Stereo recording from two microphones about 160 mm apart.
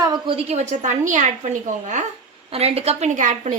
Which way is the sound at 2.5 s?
40° right (ahead or behind).